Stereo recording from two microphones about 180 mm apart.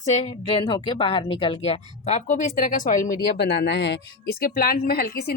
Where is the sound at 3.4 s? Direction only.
65° left (ahead or behind).